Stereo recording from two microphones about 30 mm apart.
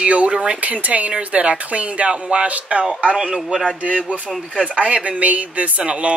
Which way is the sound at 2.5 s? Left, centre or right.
Right.